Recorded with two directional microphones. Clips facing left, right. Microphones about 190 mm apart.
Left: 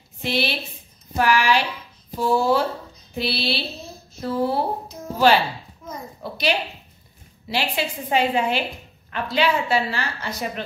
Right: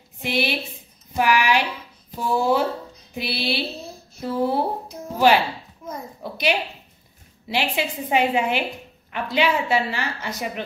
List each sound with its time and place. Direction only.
0.2 s a woman's voice: 15° right (ahead or behind)
7.4 s a woman's voice: 15° right (ahead or behind)